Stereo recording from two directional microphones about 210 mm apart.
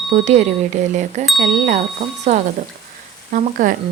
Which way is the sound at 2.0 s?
30° right (ahead or behind).